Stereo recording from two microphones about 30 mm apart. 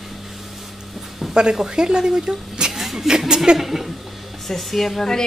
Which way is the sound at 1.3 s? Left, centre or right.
Right.